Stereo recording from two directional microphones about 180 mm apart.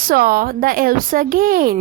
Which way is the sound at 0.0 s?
55° right (ahead or behind).